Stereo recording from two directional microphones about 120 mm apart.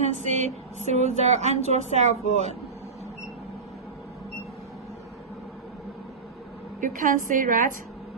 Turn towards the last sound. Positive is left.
turn(degrees=-90)